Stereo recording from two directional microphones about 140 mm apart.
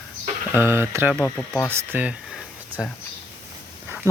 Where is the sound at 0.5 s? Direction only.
15° right (ahead or behind).